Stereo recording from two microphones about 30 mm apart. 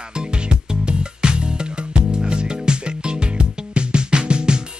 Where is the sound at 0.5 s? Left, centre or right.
Right.